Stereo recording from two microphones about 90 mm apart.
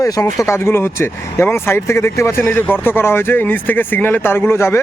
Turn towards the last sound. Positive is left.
turn(degrees=30)  # may be behind; listen again after turning